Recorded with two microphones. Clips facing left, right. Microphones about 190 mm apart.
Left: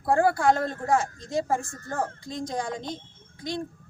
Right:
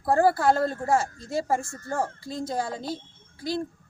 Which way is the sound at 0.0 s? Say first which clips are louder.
Right 1 dB; centre (ahead or behind).